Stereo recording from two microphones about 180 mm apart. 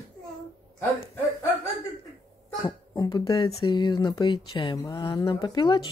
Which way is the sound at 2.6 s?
20° left (ahead or behind).